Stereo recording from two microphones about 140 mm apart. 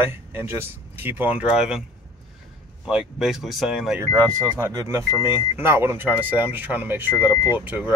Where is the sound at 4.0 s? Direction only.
30° right (ahead or behind).